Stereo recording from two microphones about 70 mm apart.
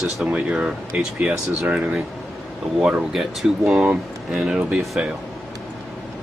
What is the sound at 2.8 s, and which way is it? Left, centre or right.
Speech, centre.